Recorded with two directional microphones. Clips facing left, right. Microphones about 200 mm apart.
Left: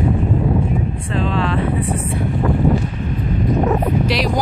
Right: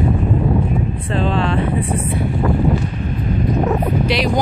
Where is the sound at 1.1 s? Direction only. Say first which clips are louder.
Right 1 dB; 30° right (ahead or behind).